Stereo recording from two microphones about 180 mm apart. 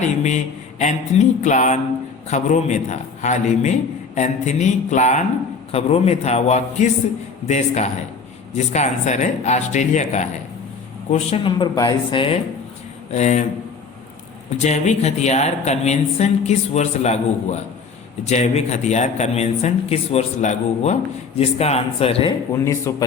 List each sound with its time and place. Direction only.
0.0 s speech: 40° left (ahead or behind)
11.5 s a woman's voice: 25° left (ahead or behind)
13.1 s a man's voice: 40° left (ahead or behind)
14.6 s speech: 40° left (ahead or behind)
22.6 s a man's voice: 15° left (ahead or behind)